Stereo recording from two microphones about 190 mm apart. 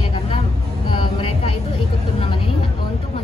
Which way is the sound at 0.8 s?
30° left (ahead or behind).